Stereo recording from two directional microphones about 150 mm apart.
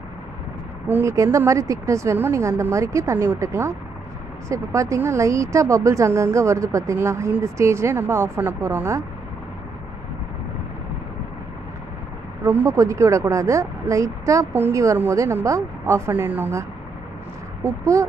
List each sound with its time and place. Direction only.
0.8 s a woman's voice: 15° right (ahead or behind)
12.4 s a woman's voice: 20° right (ahead or behind)
17.6 s a woman's voice: 20° right (ahead or behind)